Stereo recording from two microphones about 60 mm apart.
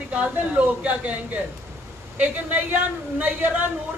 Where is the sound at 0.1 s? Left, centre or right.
Right.